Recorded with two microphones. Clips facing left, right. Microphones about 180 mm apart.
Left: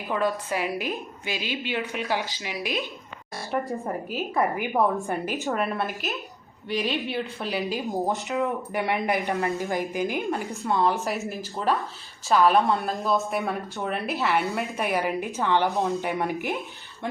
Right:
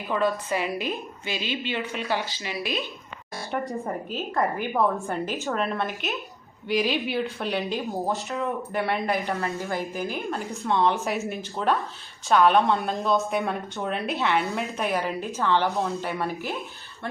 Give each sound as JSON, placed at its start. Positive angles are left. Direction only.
{"t": 0.1, "sound": "a woman's voice", "side_deg": 10}
{"t": 3.5, "sound": "a woman's voice", "side_deg": 0}
{"t": 4.4, "sound": "a woman's voice", "side_deg": 15}
{"t": 7.9, "sound": "a woman's voice", "side_deg": 15}
{"t": 10.5, "sound": "a woman's voice", "side_deg": 0}